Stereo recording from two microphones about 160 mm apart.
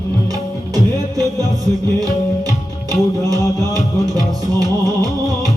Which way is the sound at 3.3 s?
25° right (ahead or behind).